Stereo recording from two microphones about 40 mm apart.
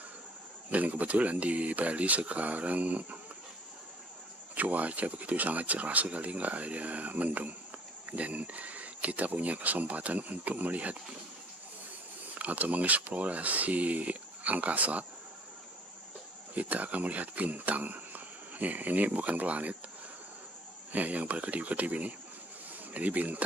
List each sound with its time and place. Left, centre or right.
0.7 s speech: right
4.6 s speech: right
12.4 s speech: right
16.5 s speech: right
20.9 s speech: right